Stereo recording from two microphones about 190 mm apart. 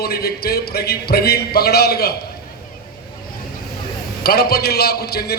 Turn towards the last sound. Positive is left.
turn(degrees=55)  # may be behind; listen again after turning